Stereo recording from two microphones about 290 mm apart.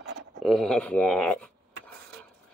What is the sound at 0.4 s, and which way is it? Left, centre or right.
Speech, centre.